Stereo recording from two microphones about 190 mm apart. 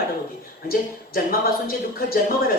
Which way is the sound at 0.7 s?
50° left (ahead or behind).